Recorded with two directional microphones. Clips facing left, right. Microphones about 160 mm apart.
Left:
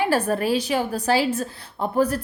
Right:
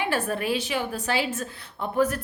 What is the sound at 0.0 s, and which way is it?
A woman's voice, 40° left (ahead or behind).